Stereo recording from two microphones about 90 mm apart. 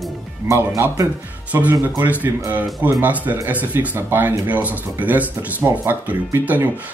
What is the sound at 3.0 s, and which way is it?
Speech, 15° right (ahead or behind).